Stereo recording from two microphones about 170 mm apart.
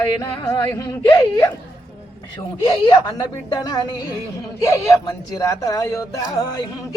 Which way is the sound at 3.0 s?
25° left (ahead or behind).